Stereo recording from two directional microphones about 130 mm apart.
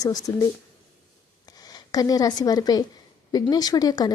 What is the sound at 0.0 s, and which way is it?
Speech, 30° left (ahead or behind).